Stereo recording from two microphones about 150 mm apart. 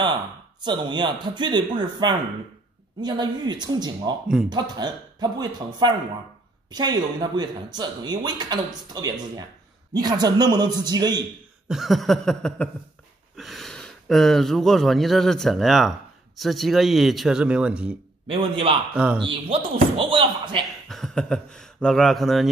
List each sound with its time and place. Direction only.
0.7 s speech: 30° right (ahead or behind)
11.6 s speech: centre (ahead or behind)
18.3 s speech: 35° right (ahead or behind)
20.9 s speech: centre (ahead or behind)